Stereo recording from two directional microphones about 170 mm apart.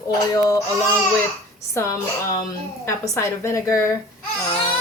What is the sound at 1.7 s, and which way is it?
Speech, 15° left (ahead or behind).